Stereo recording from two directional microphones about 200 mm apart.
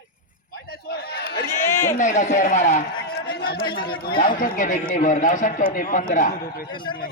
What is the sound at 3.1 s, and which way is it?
Chatter, 55° left (ahead or behind).